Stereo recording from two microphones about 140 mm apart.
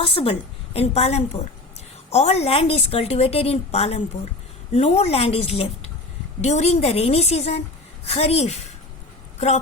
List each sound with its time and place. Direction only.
0.0 s a woman's voice: 40° left (ahead or behind)